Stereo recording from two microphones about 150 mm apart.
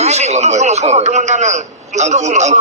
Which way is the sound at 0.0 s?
45° right (ahead or behind).